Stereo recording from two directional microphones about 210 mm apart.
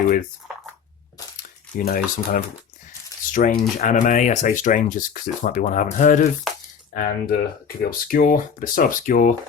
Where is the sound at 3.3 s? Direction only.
40° left (ahead or behind).